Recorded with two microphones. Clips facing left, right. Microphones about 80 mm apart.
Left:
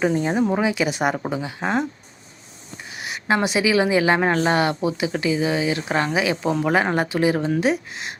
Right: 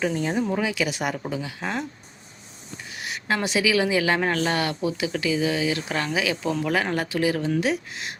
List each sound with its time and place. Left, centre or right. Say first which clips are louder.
0.0 s a woman's voice: left 4 dB; left
3.0 s a woman's voice: left 5 dB; left